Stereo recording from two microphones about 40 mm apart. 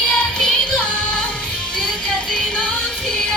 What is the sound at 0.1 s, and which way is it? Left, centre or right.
Music, centre.